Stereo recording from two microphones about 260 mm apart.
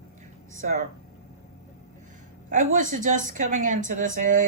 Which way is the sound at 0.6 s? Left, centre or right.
Right.